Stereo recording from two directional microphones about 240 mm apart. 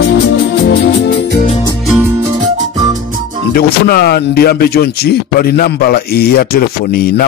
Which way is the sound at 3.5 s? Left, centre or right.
Left.